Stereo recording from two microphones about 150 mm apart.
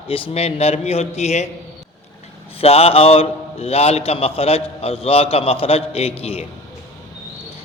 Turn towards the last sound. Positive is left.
turn(degrees=40)  # may be behind; listen again after turning